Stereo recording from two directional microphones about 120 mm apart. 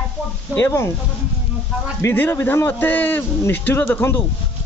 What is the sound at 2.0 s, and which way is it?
A man's voice, 20° left (ahead or behind).